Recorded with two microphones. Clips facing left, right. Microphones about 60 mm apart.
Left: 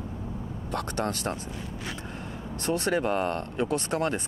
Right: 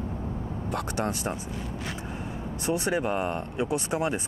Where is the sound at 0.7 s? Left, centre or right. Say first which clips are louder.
Even; centre.